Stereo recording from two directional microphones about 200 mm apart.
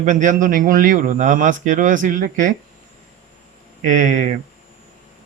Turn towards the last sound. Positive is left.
turn(degrees=-40)  # may be behind; listen again after turning